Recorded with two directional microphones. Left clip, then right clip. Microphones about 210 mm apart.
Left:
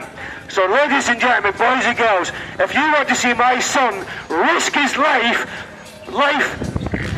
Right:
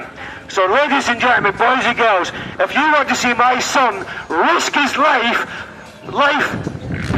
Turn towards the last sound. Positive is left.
turn(degrees=10)  # may be behind; listen again after turning